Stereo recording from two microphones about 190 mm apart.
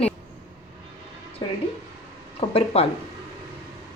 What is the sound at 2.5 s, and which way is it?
Speech, 30° left (ahead or behind).